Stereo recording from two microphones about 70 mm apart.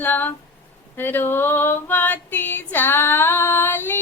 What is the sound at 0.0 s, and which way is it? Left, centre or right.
Speech, left.